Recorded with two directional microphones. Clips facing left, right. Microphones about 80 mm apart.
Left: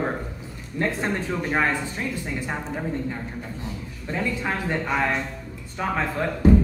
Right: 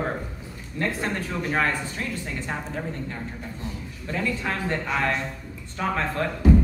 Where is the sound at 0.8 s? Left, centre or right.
Centre.